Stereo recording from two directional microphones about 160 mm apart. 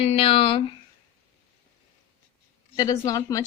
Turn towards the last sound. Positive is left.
turn(degrees=20)  # may be behind; listen again after turning